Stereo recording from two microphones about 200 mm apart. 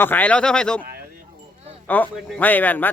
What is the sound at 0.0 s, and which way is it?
Speech, 10° left (ahead or behind).